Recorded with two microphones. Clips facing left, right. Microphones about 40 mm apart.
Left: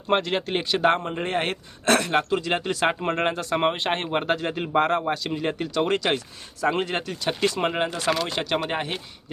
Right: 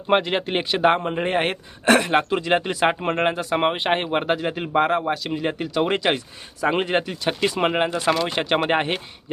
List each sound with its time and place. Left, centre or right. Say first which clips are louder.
0.1 s speech: right 3 dB; centre
8.4 s speech: right 5 dB; right